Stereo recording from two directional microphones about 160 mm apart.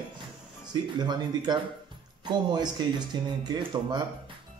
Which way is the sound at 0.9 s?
25° right (ahead or behind).